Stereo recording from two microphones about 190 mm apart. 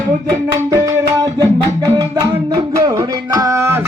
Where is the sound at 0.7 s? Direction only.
20° right (ahead or behind).